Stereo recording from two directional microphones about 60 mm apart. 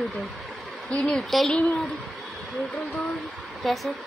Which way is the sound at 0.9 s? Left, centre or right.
Centre.